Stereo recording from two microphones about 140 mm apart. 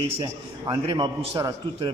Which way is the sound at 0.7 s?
30° right (ahead or behind).